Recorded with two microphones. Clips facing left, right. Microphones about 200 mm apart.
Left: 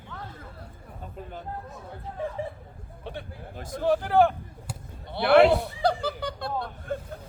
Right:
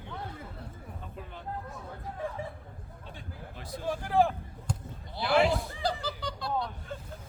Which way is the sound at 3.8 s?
70° left (ahead or behind).